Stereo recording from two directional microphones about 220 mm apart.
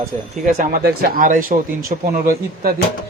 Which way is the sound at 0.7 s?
40° right (ahead or behind).